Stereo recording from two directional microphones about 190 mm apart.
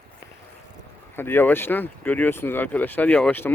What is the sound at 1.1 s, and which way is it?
Speech, 10° left (ahead or behind).